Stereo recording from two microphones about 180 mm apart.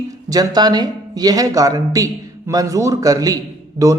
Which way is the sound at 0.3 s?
20° right (ahead or behind).